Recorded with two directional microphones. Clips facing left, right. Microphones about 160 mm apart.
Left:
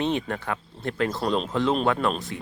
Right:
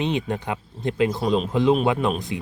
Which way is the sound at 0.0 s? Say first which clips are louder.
Right 1 dB; 15° right (ahead or behind).